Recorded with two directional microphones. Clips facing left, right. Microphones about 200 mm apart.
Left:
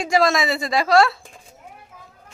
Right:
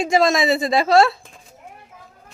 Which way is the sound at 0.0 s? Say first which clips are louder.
Right 2 dB; 25° right (ahead or behind).